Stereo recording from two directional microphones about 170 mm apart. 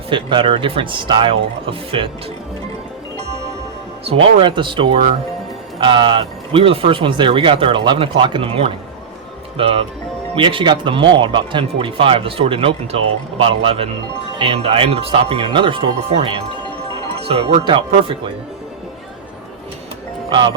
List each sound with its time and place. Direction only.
0.1 s speech: 30° right (ahead or behind)
4.0 s speech: 30° right (ahead or behind)